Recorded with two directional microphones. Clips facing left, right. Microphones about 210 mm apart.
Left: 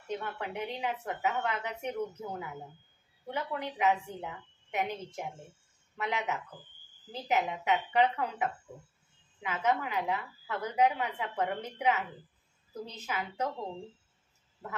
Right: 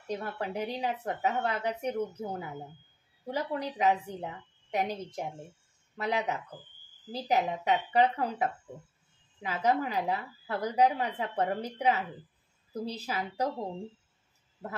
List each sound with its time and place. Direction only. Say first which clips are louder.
0.1 s speech: right 2 dB; 35° right (ahead or behind)